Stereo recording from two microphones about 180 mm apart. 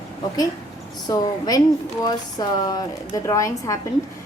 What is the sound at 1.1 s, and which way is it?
A woman's voice, 20° left (ahead or behind).